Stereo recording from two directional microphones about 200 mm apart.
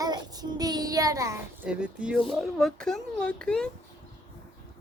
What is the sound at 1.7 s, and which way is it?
Speech, 5° right (ahead or behind).